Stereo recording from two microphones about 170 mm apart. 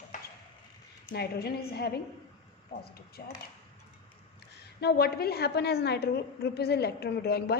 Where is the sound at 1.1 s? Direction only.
70° left (ahead or behind).